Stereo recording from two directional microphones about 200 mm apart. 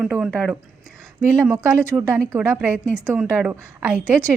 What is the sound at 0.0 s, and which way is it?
A woman's voice, 5° right (ahead or behind).